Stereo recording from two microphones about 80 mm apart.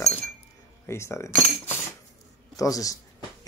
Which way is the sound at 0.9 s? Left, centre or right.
Left.